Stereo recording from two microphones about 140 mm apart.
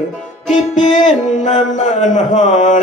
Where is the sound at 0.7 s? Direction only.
60° left (ahead or behind).